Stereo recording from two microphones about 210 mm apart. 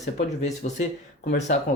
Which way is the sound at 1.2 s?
55° left (ahead or behind).